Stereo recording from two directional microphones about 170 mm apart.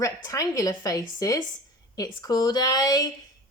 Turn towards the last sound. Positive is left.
turn(degrees=20)  # may be behind; listen again after turning